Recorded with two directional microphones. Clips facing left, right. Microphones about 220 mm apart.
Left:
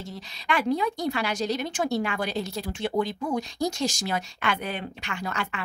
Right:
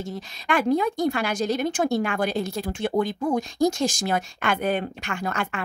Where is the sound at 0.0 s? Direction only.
50° right (ahead or behind).